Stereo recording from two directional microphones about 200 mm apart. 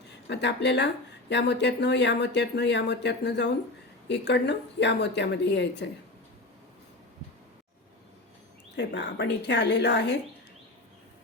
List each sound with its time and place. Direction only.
0.3 s speech: 60° left (ahead or behind)
8.7 s speech: 60° left (ahead or behind)